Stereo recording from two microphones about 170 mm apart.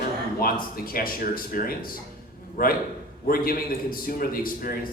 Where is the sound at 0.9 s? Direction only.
60° left (ahead or behind).